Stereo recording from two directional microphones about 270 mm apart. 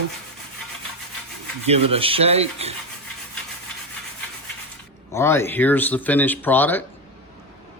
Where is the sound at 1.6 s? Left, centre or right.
Right.